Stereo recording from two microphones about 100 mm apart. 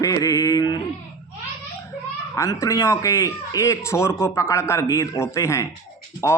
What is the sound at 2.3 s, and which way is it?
Speech, 30° left (ahead or behind).